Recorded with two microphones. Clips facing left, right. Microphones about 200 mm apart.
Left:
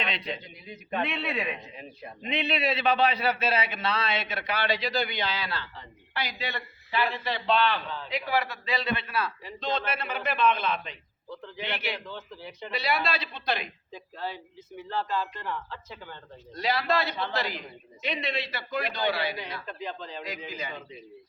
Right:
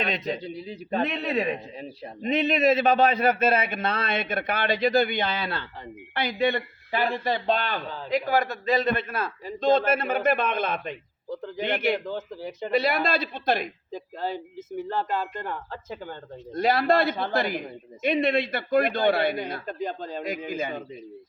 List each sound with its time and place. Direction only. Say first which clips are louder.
0.0 s a man's voice: right 6 dB; 45° right (ahead or behind)